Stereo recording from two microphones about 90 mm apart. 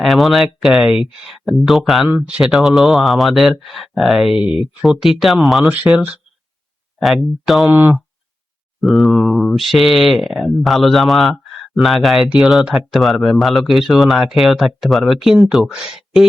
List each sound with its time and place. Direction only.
0.0 s speech: centre (ahead or behind)
5.6 s speech: 20° right (ahead or behind)
7.0 s speech: centre (ahead or behind)
7.7 s speech: 20° right (ahead or behind)
8.8 s speech: centre (ahead or behind)